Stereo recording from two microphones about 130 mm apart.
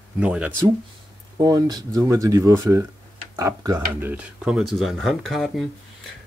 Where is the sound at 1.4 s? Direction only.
30° right (ahead or behind).